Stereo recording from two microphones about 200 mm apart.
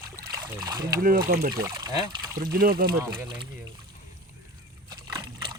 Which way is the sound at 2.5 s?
45° right (ahead or behind).